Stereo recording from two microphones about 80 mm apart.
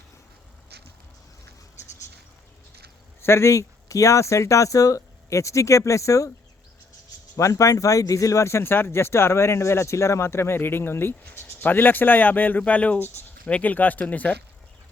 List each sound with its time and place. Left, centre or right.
3.2 s speech: left
7.3 s speech: left; by 14.3 s centre